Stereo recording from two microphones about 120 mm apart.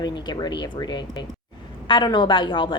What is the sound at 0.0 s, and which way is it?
A woman's voice, 35° left (ahead or behind).